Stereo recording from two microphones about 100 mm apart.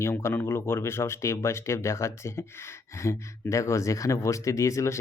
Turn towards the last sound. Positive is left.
turn(degrees=30)  # may be behind; listen again after turning